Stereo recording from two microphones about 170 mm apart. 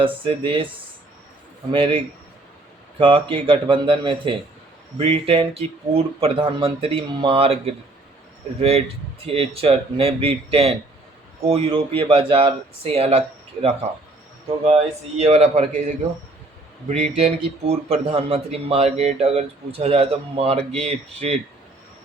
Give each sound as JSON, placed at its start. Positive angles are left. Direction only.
{"t": 0.0, "sound": "speech", "side_deg": -30}
{"t": 1.7, "sound": "speech", "side_deg": -30}
{"t": 15.2, "sound": "speech", "side_deg": -40}